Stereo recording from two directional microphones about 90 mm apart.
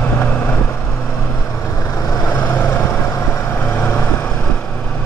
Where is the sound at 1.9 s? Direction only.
35° left (ahead or behind).